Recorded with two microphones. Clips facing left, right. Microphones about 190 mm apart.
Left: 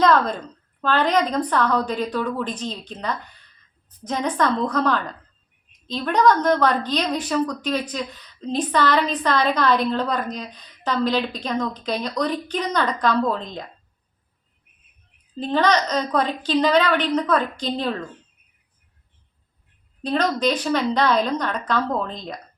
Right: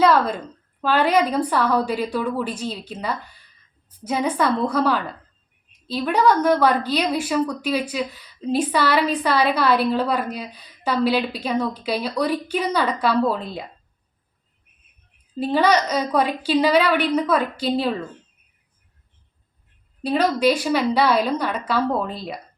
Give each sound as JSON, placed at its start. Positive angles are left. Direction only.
{"t": 0.0, "sound": "a woman's voice", "side_deg": -10}
{"t": 15.4, "sound": "a woman's voice", "side_deg": -10}
{"t": 20.0, "sound": "a woman's voice", "side_deg": -10}